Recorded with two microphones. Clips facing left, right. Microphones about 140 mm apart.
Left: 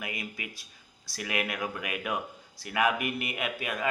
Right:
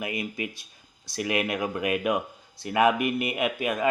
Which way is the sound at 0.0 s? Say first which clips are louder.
Right 7 dB; 25° right (ahead or behind).